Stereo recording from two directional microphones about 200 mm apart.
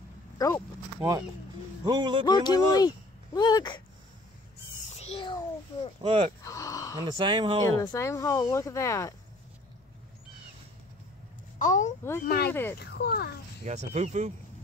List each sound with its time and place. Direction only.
0.4 s speech: 15° left (ahead or behind)
1.9 s speech: 20° right (ahead or behind)
2.2 s speech: 20° left (ahead or behind)
4.9 s a child's voice: 30° left (ahead or behind)
6.0 s speech: 25° right (ahead or behind)
6.4 s a sound: 15° left (ahead or behind)
7.0 s speech: 25° right (ahead or behind)
7.8 s speech: 15° left (ahead or behind)
11.5 s a child's voice: 40° left (ahead or behind)
12.3 s speech: 55° left (ahead or behind)
13.7 s speech: 35° right (ahead or behind)